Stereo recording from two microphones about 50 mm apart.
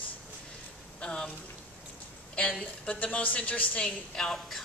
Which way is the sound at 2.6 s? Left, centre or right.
Left.